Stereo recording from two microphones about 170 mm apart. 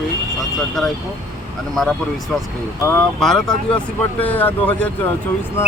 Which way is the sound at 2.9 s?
5° left (ahead or behind).